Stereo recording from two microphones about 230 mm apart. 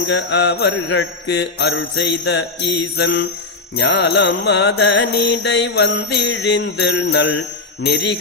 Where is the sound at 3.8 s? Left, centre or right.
Left.